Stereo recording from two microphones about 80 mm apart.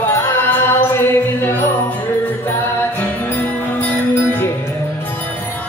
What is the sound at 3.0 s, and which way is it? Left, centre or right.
Music, left.